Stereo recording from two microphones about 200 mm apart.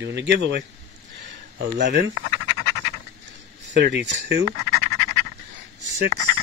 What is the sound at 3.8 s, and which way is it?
Speech, 60° right (ahead or behind).